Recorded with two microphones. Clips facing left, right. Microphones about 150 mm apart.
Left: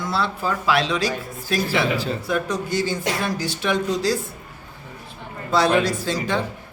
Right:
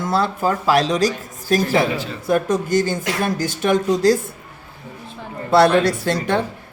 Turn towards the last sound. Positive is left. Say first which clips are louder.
# right 4 dB
turn(degrees=-60)  # may be behind; listen again after turning